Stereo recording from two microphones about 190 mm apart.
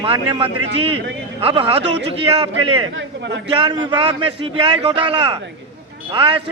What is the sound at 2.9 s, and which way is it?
Speech, 65° right (ahead or behind).